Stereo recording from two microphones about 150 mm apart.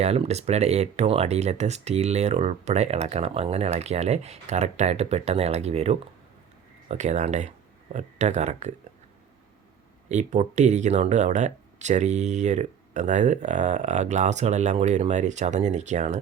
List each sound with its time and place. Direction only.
0.0 s speech: 45° right (ahead or behind)
10.1 s speech: 50° right (ahead or behind)